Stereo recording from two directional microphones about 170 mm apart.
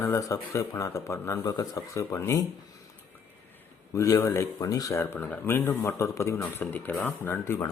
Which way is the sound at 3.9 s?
20° left (ahead or behind).